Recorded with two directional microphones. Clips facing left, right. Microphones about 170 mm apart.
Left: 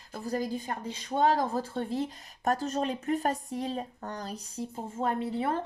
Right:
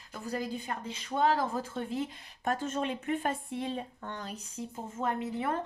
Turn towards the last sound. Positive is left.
turn(degrees=30)  # may be behind; listen again after turning